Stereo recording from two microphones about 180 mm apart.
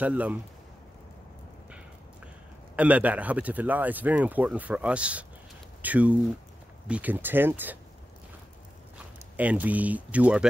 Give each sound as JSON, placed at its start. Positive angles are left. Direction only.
{"t": 0.0, "sound": "speech", "side_deg": -10}
{"t": 2.7, "sound": "speech", "side_deg": -5}
{"t": 8.9, "sound": "speech", "side_deg": -10}